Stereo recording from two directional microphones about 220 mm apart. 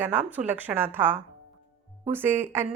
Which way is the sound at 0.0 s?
10° right (ahead or behind).